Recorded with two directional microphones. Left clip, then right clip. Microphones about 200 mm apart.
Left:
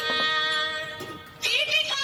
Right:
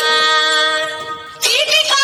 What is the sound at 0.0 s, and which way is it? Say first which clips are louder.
Music: right 11 dB; 45° right (ahead or behind).